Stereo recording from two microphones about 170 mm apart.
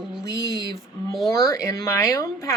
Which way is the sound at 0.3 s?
20° left (ahead or behind).